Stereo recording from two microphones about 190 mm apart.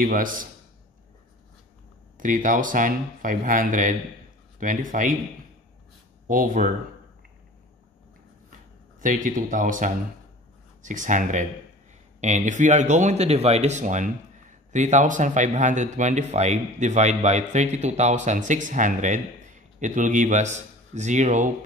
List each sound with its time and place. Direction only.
0.0 s speech: 45° right (ahead or behind)
2.1 s speech: 45° right (ahead or behind)
6.2 s speech: 45° right (ahead or behind)
9.0 s speech: 45° right (ahead or behind)